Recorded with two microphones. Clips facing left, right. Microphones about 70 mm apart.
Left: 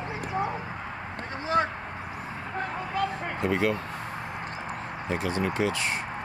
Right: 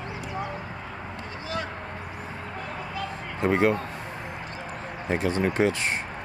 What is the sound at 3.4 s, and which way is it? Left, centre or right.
Speech, right.